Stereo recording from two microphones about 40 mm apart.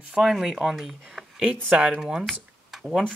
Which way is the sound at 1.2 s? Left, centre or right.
Centre.